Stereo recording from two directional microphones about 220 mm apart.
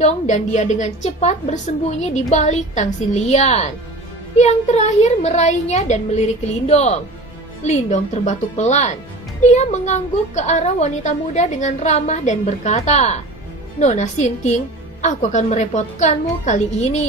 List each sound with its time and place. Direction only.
0.0 s a woman's voice: 35° left (ahead or behind)